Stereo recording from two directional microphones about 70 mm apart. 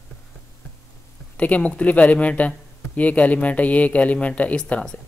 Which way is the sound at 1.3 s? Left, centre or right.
Centre.